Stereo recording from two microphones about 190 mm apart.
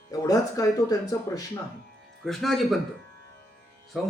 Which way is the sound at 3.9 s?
Centre (ahead or behind).